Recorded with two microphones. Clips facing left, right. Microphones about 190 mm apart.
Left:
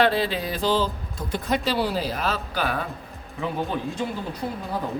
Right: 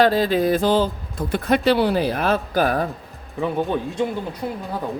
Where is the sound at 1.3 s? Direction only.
60° right (ahead or behind); by 2.8 s 45° right (ahead or behind).